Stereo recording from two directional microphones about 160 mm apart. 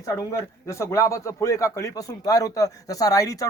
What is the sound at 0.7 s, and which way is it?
Speech, 20° left (ahead or behind).